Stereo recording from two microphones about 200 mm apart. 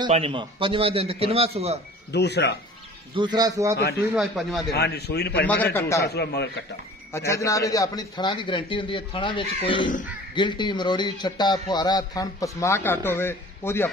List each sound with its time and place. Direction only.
0.0 s a man's voice: 25° right (ahead or behind)
2.1 s a man's voice: 55° left (ahead or behind)
3.2 s a man's voice: 20° right (ahead or behind)
4.1 s a man's voice: centre (ahead or behind)
4.7 s a man's voice: 55° left (ahead or behind)
5.5 s a man's voice: 10° left (ahead or behind)
6.0 s a man's voice: 55° left (ahead or behind)
7.1 s a man's voice: 15° left (ahead or behind)